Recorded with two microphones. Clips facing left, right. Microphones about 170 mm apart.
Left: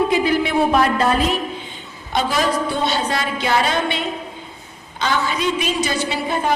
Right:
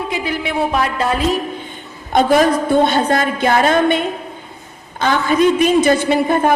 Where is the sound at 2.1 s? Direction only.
50° right (ahead or behind).